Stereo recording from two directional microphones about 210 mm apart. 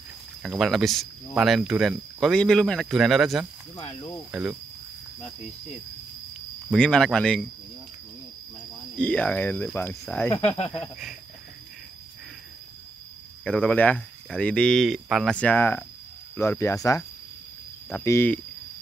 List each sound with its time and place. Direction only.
0.4 s speech: centre (ahead or behind)
3.7 s speech: 20° left (ahead or behind)
4.3 s cricket: 5° right (ahead or behind)
6.7 s speech: 5° left (ahead or behind)
8.9 s speech: 5° left (ahead or behind)
10.3 s speech: 30° left (ahead or behind)
10.8 s speech: 5° right (ahead or behind)
13.4 s speech: 5° left (ahead or behind)